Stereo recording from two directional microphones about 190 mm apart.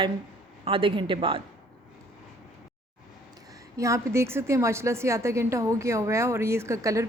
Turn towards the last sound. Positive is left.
turn(degrees=-15)  # may be behind; listen again after turning